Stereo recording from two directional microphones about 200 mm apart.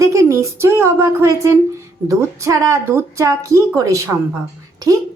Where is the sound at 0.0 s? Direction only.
15° right (ahead or behind).